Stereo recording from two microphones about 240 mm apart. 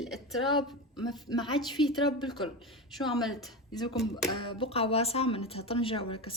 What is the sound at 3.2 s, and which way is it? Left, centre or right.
Speech, centre.